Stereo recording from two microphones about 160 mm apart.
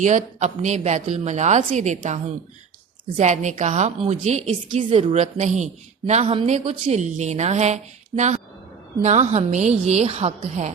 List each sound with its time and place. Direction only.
0.0 s a woman's voice: 50° right (ahead or behind)